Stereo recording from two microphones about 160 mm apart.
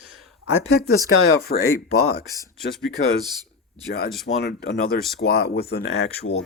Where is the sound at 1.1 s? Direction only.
70° left (ahead or behind).